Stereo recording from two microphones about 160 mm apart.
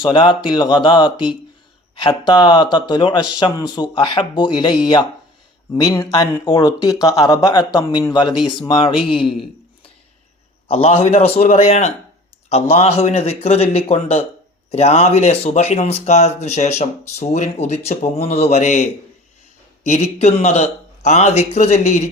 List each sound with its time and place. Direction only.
0.0 s a man's voice: 30° left (ahead or behind)
9.2 s a sound: 30° left (ahead or behind)
10.7 s a man's voice: 35° left (ahead or behind)